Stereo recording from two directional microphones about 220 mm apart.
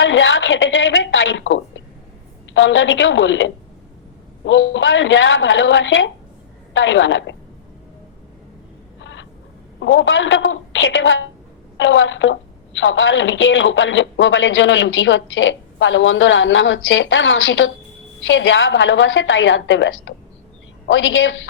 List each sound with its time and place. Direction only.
0.0 s a woman's voice: 60° left (ahead or behind)
9.0 s vehicle: 55° left (ahead or behind)
9.8 s a woman's voice: 55° left (ahead or behind)